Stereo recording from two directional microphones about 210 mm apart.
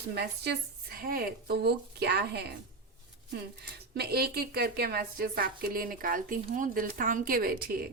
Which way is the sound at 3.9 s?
50° right (ahead or behind).